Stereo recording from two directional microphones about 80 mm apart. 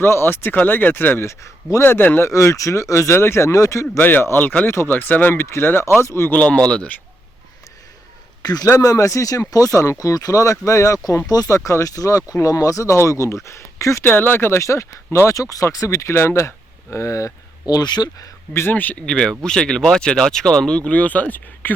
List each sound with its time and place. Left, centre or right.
0.0 s speech: left
1.8 s speech: left
2.2 s speech: left
3.9 s speech: left
6.3 s speech: centre
8.4 s a man's voice: left
8.6 s speech: left
14.0 s speech: left
17.7 s speech: left
18.5 s speech: left